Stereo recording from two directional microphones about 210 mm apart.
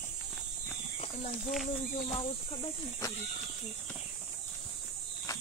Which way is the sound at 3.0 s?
15° left (ahead or behind).